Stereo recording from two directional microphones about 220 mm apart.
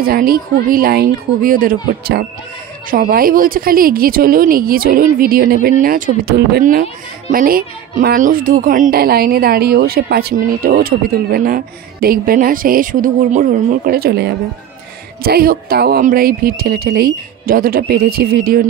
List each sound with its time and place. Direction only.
0.0 s a woman's voice: 40° right (ahead or behind)